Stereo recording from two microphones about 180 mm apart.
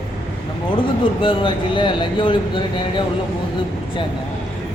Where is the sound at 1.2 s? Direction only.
30° left (ahead or behind).